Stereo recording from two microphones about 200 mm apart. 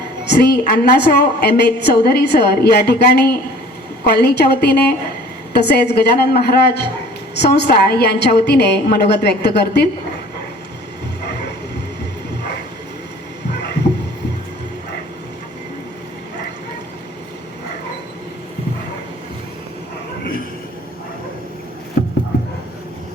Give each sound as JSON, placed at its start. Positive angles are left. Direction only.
{"t": 0.3, "sound": "a woman's voice", "side_deg": 55}